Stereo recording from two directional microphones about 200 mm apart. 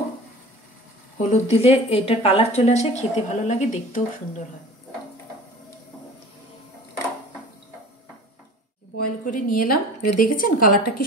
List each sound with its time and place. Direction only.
1.1 s a woman's voice: 35° left (ahead or behind)
8.9 s a woman's voice: 45° left (ahead or behind)